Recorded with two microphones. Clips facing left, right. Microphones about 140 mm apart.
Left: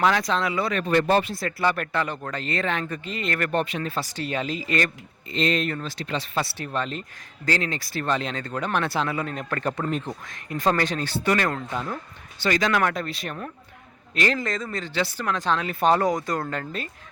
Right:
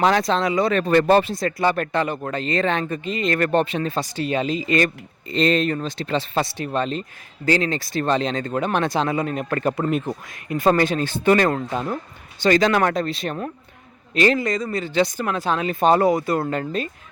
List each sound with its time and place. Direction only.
0.2 s speech: 25° right (ahead or behind)
0.8 s speech: 40° right (ahead or behind)
1.4 s speech: 20° right (ahead or behind)
3.0 s speech: 20° right (ahead or behind)
5.3 s speech: 35° right (ahead or behind); by 11.2 s 15° right (ahead or behind)
11.3 s speech: 30° right (ahead or behind)
14.3 s a man's voice: centre (ahead or behind); by 16.9 s 20° right (ahead or behind)